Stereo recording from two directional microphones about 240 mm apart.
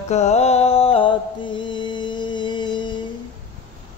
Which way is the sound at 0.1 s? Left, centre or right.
Left.